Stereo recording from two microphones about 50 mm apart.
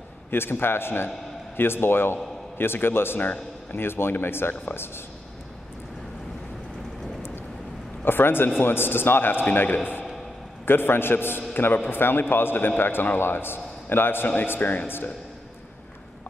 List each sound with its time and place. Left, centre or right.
0.3 s a man's voice: left
8.0 s a man's voice: left
10.6 s a man's voice: left